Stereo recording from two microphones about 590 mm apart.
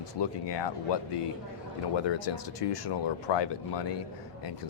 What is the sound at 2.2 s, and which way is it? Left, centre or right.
Speech, left.